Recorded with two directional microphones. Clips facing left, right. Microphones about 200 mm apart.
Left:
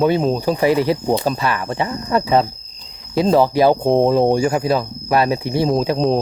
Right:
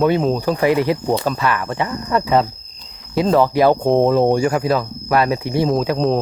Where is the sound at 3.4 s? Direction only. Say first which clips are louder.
Even; 30° left (ahead or behind).